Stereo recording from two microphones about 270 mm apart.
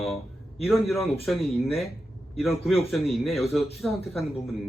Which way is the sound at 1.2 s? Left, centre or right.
Centre.